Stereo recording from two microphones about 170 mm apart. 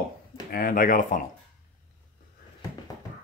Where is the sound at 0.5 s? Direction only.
60° left (ahead or behind).